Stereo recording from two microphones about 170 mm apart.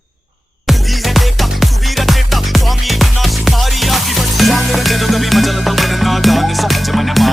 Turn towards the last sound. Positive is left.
turn(degrees=0)  # may be behind; listen again after turning